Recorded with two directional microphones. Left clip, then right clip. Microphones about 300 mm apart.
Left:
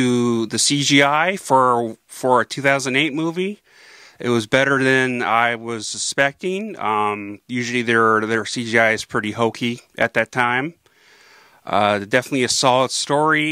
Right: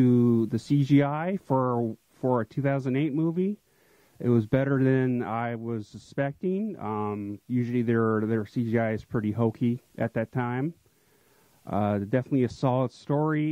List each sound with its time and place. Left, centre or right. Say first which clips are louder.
0.0 s a sound: left 4 dB; centre
0.5 s speech: left 9 dB; centre
1.5 s speech: left 11 dB; centre
2.3 s speech: left 13 dB; centre